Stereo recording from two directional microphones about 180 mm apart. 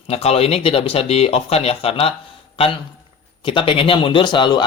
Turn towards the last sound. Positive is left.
turn(degrees=25)  # may be behind; listen again after turning